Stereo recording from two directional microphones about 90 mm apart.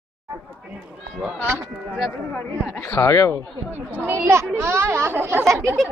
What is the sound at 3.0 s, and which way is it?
Speech, 30° left (ahead or behind).